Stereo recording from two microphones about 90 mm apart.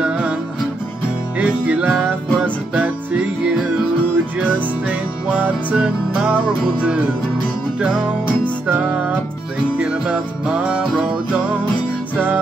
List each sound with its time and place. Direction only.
0.0 s music: 15° right (ahead or behind)
1.4 s music: 15° right (ahead or behind)
4.8 s music: 15° right (ahead or behind)
8.6 s music: 20° right (ahead or behind)